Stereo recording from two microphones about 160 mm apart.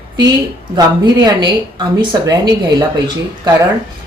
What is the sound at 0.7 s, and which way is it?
A woman's voice, 25° right (ahead or behind).